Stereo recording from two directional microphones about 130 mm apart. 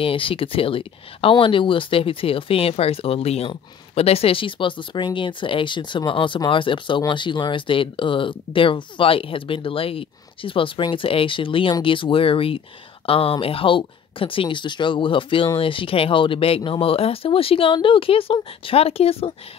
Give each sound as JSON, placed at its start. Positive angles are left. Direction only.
{"t": 0.0, "sound": "speech", "side_deg": 45}